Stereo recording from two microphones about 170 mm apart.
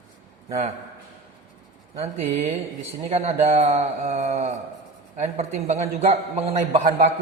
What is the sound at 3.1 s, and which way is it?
Speech, 35° right (ahead or behind).